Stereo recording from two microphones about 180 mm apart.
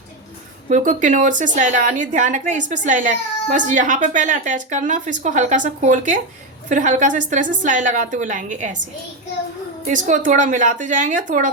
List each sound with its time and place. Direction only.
0.7 s a woman's voice: 45° right (ahead or behind)
9.8 s a woman's voice: 45° right (ahead or behind)